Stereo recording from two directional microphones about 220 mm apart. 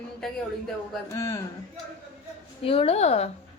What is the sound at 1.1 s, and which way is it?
Speech, 15° left (ahead or behind).